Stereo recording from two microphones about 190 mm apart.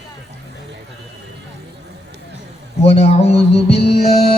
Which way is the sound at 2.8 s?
30° left (ahead or behind).